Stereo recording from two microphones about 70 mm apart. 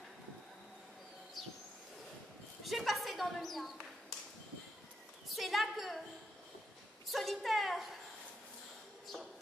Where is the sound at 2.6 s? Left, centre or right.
Centre.